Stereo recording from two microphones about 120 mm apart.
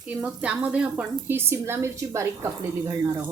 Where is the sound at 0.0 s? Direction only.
15° right (ahead or behind).